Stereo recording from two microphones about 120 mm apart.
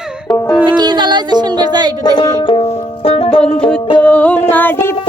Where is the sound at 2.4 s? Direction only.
50° left (ahead or behind).